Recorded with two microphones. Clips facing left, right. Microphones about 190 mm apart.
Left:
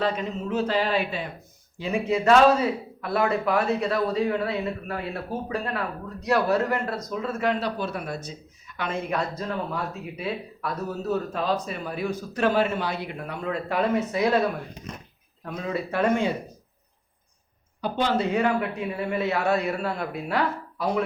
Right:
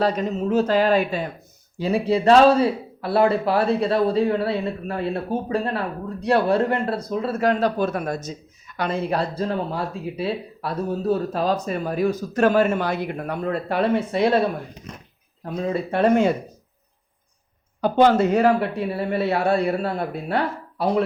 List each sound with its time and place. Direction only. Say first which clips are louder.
0.0 s speech: right 5 dB; 40° right (ahead or behind)
17.7 s speech: right 8 dB; 50° right (ahead or behind); by 21.0 s 30° right (ahead or behind)